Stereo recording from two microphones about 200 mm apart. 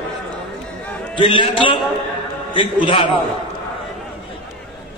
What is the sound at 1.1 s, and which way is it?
A man's voice, 25° left (ahead or behind).